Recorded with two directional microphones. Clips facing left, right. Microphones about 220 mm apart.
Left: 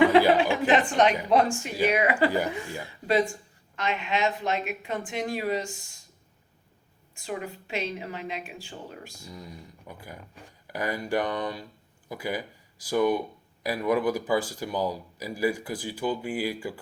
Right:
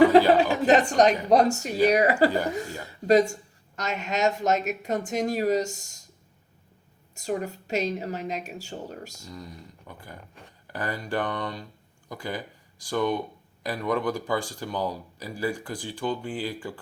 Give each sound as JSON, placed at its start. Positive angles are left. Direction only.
{"t": 0.3, "sound": "a woman's voice", "side_deg": -40}
{"t": 7.2, "sound": "a woman's voice", "side_deg": -40}
{"t": 9.2, "sound": "speech", "side_deg": 10}